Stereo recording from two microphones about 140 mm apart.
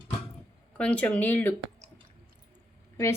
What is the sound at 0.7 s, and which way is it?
Speech, 10° left (ahead or behind).